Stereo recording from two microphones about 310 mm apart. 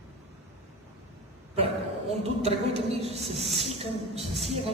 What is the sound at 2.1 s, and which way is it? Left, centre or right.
A woman's voice, centre.